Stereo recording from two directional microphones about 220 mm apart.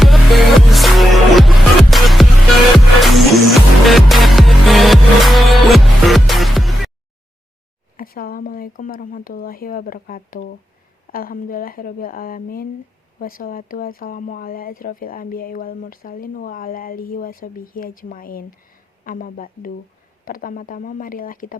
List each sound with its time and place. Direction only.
0.0 s music: centre (ahead or behind)
7.9 s speech: 40° left (ahead or behind)